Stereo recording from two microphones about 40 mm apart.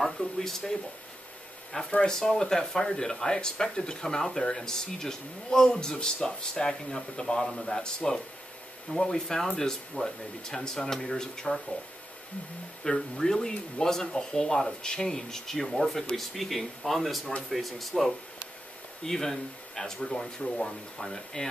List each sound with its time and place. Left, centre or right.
0.0 s speech: centre
12.8 s speech: centre